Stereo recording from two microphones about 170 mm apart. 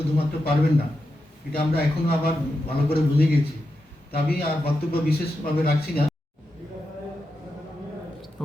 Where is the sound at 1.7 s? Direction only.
65° left (ahead or behind).